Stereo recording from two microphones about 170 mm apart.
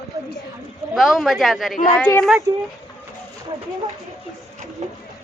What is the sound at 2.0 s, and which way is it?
Speech, 15° left (ahead or behind).